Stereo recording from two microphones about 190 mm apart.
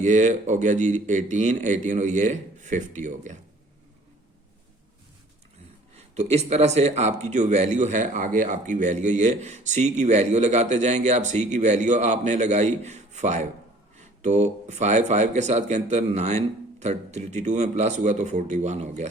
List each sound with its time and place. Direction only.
0.0 s speech: 40° right (ahead or behind)
6.1 s speech: 35° right (ahead or behind)